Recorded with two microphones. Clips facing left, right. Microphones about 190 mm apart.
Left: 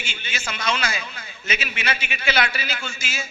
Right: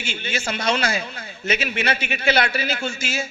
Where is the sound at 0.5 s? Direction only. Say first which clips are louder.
Right 3 dB; 60° right (ahead or behind).